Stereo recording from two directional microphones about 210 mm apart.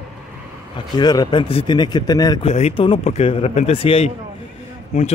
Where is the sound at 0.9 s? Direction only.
20° left (ahead or behind).